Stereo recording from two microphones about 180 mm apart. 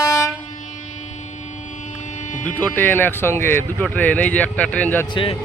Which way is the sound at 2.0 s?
40° left (ahead or behind).